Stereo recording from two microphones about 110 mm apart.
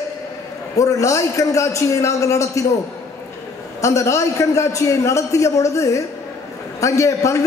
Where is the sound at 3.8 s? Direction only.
30° left (ahead or behind).